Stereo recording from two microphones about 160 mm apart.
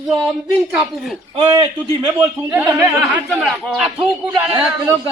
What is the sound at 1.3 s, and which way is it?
Speech, 35° right (ahead or behind).